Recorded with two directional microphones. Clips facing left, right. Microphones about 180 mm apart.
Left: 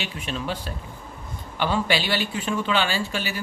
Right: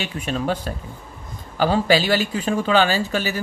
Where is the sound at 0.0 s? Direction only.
45° right (ahead or behind).